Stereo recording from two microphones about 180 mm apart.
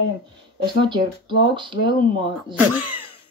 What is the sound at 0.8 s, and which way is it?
Speech, 25° right (ahead or behind).